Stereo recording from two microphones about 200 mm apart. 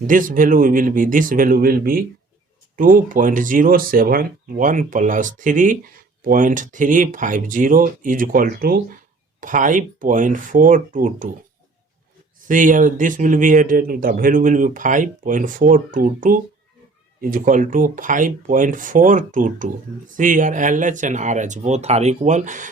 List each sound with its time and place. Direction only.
0.1 s speech: 40° right (ahead or behind)
12.5 s speech: 40° right (ahead or behind)